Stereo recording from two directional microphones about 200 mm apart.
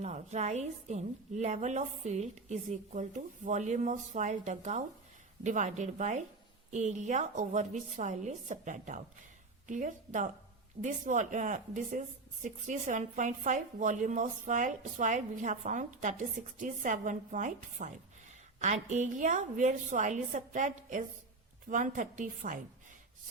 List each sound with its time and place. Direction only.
0.0 s a woman's voice: 35° right (ahead or behind)